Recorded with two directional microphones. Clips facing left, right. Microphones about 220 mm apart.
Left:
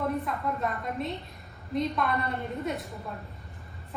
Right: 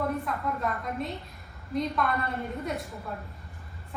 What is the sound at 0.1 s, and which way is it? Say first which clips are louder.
A woman's voice: even; centre (ahead or behind).